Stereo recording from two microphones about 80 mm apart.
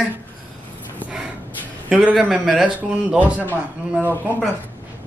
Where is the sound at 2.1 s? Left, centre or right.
Centre.